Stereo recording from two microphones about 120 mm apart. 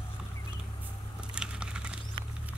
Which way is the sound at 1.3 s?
10° right (ahead or behind).